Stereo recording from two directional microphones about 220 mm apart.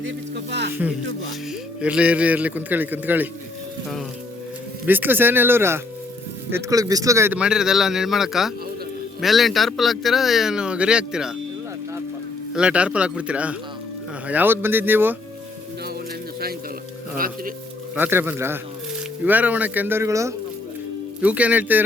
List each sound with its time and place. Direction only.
0.0 s speech: 50° right (ahead or behind)
1.8 s a man's voice: 5° right (ahead or behind)
4.9 s a man's voice: 10° right (ahead or behind)
12.5 s a man's voice: 5° right (ahead or behind)
17.2 s speech: 40° right (ahead or behind)
17.9 s a man's voice: 10° right (ahead or behind)